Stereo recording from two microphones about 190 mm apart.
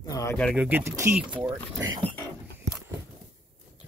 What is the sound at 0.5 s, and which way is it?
Speech, 10° right (ahead or behind).